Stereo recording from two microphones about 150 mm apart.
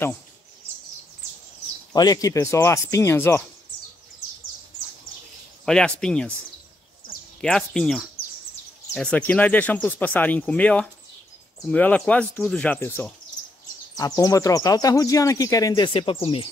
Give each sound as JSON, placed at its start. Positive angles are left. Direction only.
{"t": 2.0, "sound": "speech", "side_deg": 25}
{"t": 5.7, "sound": "speech", "side_deg": 5}
{"t": 7.4, "sound": "speech", "side_deg": 5}